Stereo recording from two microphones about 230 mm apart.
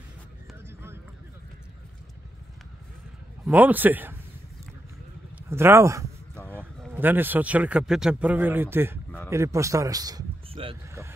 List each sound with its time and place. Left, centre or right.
3.4 s speech: centre
5.5 s speech: centre